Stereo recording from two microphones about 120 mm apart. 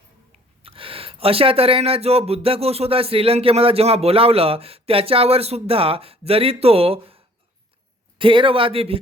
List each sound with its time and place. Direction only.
0.6 s speech: 50° right (ahead or behind)